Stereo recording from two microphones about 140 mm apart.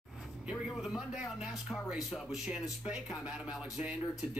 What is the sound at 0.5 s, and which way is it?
A man's voice, centre (ahead or behind).